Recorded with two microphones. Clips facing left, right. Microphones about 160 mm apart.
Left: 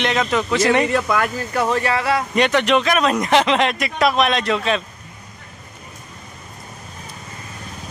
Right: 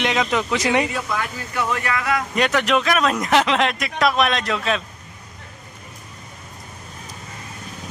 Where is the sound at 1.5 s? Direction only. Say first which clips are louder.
Left 3 dB; 35° left (ahead or behind).